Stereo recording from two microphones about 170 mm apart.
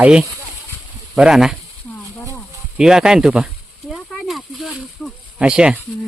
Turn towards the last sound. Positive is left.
turn(degrees=-5)  # may be behind; listen again after turning